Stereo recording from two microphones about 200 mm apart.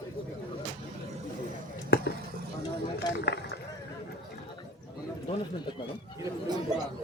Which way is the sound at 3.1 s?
60° left (ahead or behind).